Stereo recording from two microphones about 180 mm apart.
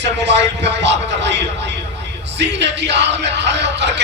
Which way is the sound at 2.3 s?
75° right (ahead or behind).